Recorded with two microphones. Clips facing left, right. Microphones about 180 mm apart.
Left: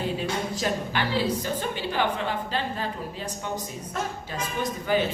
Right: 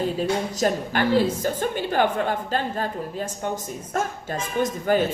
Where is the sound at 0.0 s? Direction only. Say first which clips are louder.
Right 4 dB; 45° right (ahead or behind).